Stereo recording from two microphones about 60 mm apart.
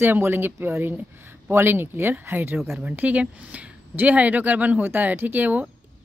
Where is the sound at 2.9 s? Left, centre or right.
Right.